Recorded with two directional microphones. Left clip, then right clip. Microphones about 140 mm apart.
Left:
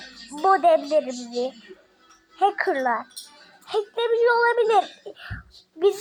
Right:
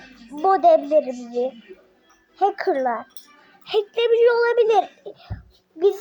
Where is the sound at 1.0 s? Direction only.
Centre (ahead or behind).